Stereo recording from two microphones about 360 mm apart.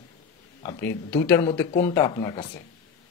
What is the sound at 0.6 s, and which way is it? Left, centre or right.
Speech, centre.